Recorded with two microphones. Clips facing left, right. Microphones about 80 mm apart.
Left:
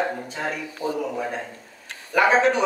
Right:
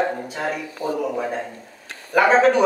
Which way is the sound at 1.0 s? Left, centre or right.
Centre.